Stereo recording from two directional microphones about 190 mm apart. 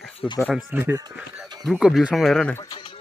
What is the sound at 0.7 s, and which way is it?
Speech, 10° right (ahead or behind).